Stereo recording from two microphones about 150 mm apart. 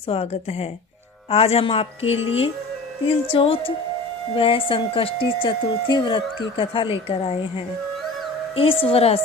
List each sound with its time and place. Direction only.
0.1 s a woman's voice: 45° left (ahead or behind)